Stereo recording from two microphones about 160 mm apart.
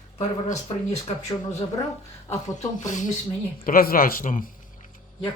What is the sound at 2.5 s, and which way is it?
Speech, 50° left (ahead or behind).